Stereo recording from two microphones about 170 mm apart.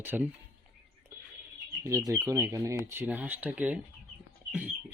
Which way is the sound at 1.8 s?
20° right (ahead or behind).